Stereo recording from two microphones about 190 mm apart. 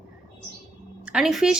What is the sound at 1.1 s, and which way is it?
Speech, centre (ahead or behind).